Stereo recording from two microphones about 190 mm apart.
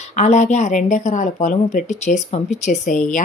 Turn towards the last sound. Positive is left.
turn(degrees=40)  # may be behind; listen again after turning